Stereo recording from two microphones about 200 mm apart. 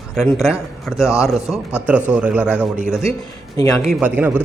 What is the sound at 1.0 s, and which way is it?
Speech, 15° left (ahead or behind).